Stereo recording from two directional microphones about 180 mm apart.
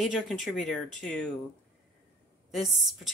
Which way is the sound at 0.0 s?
Centre (ahead or behind).